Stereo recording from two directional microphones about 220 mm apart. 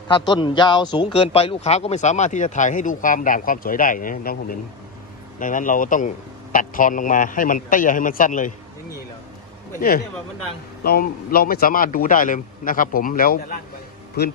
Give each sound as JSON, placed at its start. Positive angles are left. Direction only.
{"t": 0.1, "sound": "a man's voice", "side_deg": 20}
{"t": 10.8, "sound": "a man's voice", "side_deg": 45}